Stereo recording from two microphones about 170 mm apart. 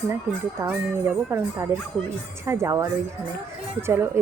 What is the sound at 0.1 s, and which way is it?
Speech, 15° right (ahead or behind).